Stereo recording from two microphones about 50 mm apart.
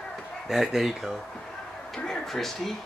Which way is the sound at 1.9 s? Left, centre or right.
Centre.